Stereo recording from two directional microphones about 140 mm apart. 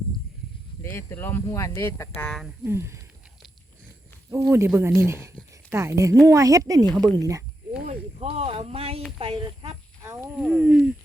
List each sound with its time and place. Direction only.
0.8 s speech: 15° left (ahead or behind)
2.2 s speech: 5° left (ahead or behind)
2.6 s speech: 20° right (ahead or behind)
4.3 s speech: 20° right (ahead or behind)
7.9 s speech: 45° right (ahead or behind)
10.3 s speech: 10° right (ahead or behind)